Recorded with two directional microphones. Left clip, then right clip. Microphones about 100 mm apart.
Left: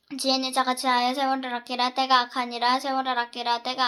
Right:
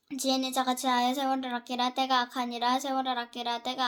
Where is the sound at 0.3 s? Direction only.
45° right (ahead or behind).